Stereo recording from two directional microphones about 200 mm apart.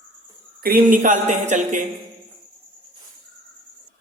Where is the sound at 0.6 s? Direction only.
45° right (ahead or behind).